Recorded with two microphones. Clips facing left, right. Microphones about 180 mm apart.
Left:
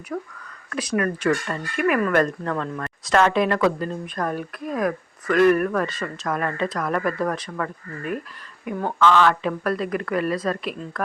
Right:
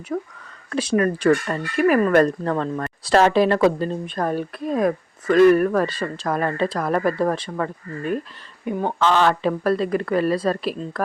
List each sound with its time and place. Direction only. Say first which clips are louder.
0.1 s speech: right 3 dB; 20° right (ahead or behind)